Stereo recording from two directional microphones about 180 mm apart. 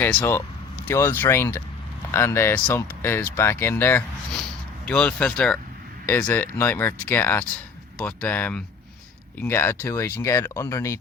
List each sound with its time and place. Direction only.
0.0 s speech: 10° left (ahead or behind)